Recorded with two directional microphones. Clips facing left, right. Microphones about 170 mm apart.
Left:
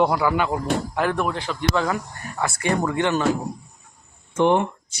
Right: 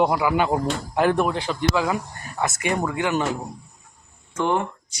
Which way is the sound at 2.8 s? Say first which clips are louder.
Left 2 dB; 5° right (ahead or behind).